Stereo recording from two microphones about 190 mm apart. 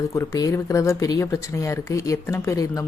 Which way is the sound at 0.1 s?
15° left (ahead or behind).